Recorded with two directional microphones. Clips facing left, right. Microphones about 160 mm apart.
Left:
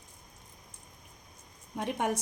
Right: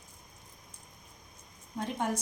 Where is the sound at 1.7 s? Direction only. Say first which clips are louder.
Left 2 dB; 65° left (ahead or behind).